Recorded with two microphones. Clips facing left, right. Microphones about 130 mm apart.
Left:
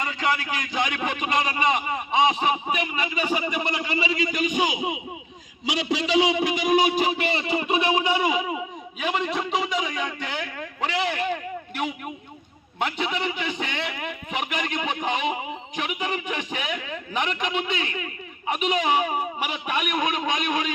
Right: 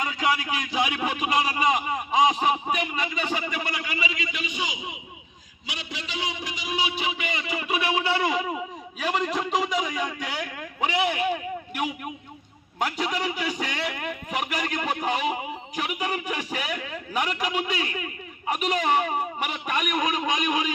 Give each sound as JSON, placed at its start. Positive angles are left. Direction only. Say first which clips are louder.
{"t": 0.0, "sound": "a man's voice", "louder": "even", "side_deg": -5}
{"t": 5.6, "sound": "a man's voice", "louder": "left 12 dB", "side_deg": 90}
{"t": 8.3, "sound": "a man's voice", "louder": "left 1 dB", "side_deg": 5}